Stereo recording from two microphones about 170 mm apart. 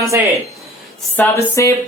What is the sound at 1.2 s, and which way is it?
Speech, 10° left (ahead or behind).